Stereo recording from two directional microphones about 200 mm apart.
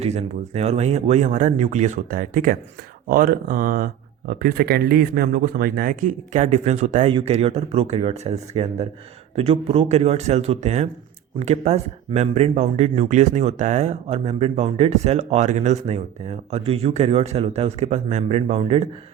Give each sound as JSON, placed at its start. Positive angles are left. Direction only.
{"t": 0.0, "sound": "speech", "side_deg": -35}